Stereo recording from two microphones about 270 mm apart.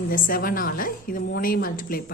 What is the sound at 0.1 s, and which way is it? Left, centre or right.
A woman's voice, left.